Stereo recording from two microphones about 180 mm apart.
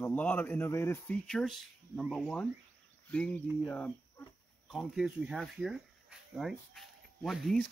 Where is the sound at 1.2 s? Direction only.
5° left (ahead or behind).